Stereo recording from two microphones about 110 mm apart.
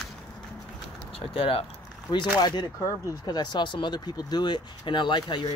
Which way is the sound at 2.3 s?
40° left (ahead or behind).